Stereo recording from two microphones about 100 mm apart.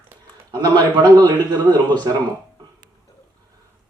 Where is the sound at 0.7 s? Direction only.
45° right (ahead or behind).